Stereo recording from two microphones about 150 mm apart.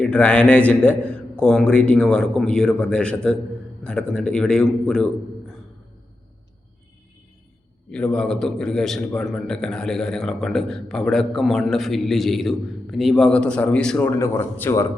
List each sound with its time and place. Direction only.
0.0 s a man's voice: 10° left (ahead or behind)
7.9 s a man's voice: 5° left (ahead or behind)